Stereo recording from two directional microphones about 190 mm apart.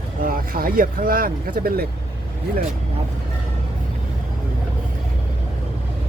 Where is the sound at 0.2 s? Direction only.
50° right (ahead or behind).